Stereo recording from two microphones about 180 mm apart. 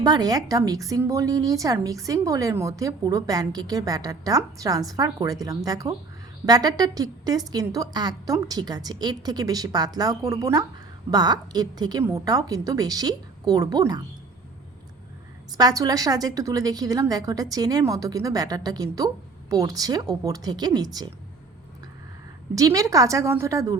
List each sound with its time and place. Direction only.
0.0 s a woman's voice: 20° right (ahead or behind)
15.5 s a woman's voice: 20° right (ahead or behind)
22.5 s a woman's voice: 20° right (ahead or behind)